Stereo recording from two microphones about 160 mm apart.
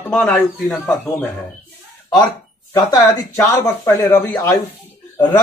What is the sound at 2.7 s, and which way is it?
Speech, 20° left (ahead or behind).